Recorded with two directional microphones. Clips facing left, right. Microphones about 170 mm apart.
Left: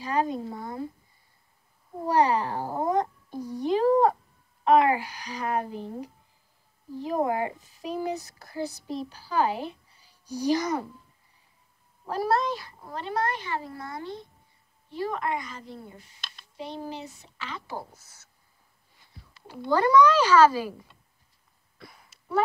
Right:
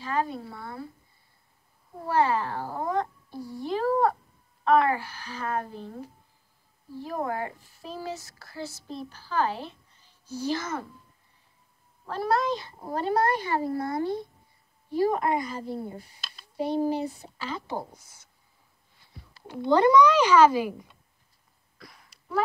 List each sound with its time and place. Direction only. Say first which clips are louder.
0.0 s speech: left 2 dB; 15° left (ahead or behind)
2.0 s speech: left 2 dB; 15° left (ahead or behind)
12.1 s speech: left 1 dB; 10° left (ahead or behind)
12.5 s speech: right 6 dB; 25° right (ahead or behind)
16.2 s a sound: even; 5° right (ahead or behind)
16.7 s speech: right 12 dB; 35° right (ahead or behind)
17.6 s a woman's voice: right 3 dB; 20° right (ahead or behind)
19.4 s a child's voice: right 5 dB; centre (ahead or behind)
19.7 s a child's voice: right 1 dB; 15° right (ahead or behind)
21.7 s cough: left 1 dB; 5° left (ahead or behind)